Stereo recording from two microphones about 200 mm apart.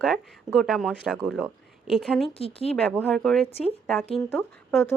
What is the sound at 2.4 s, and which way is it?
Speech, 30° left (ahead or behind).